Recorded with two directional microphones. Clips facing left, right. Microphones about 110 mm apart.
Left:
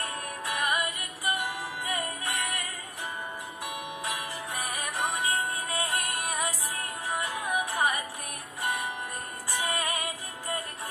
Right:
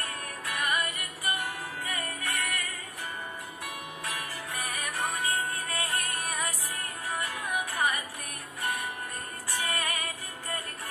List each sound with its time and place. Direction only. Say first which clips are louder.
0.0 s music: left 3 dB; 20° left (ahead or behind)
3.6 s music: left 4 dB; 20° left (ahead or behind)
9.5 s music: left 2 dB; 25° left (ahead or behind)